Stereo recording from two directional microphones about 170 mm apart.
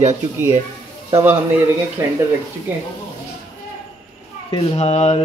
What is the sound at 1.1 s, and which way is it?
A man's voice, 10° right (ahead or behind).